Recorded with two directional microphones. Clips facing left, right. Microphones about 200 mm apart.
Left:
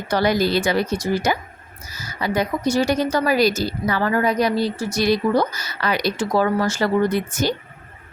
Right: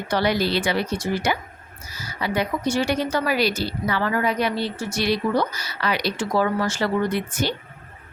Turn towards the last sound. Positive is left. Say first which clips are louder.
# left 4 dB
turn(degrees=45)  # may be behind; listen again after turning